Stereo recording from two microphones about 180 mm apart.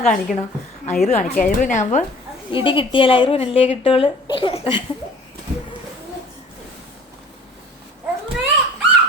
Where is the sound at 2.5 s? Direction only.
30° left (ahead or behind).